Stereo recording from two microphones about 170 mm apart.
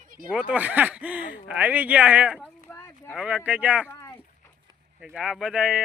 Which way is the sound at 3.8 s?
15° left (ahead or behind).